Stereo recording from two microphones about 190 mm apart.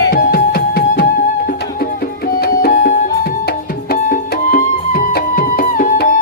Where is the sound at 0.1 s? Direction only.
50° left (ahead or behind).